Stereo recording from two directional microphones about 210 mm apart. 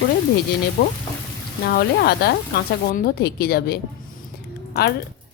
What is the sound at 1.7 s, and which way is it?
A woman's voice, 50° left (ahead or behind).